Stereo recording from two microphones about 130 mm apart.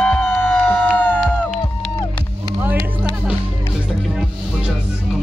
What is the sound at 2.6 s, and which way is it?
Music, 15° right (ahead or behind).